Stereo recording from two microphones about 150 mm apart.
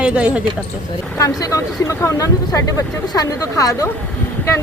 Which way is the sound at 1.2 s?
25° left (ahead or behind).